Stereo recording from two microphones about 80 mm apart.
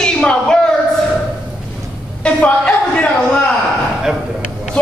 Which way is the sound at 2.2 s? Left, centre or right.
Centre.